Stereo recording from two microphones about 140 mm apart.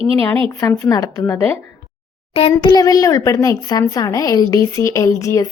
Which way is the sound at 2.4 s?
40° left (ahead or behind).